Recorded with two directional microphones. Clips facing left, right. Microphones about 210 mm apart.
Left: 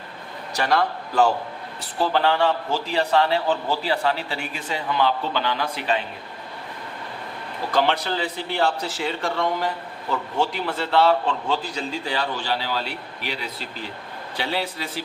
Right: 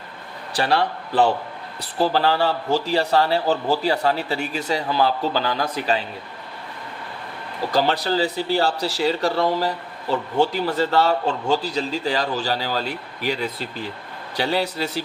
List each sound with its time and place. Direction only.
0.5 s a man's voice: 30° right (ahead or behind)
7.7 s speech: 40° right (ahead or behind)